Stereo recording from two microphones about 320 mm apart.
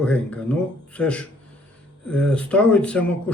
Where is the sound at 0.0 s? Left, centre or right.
Centre.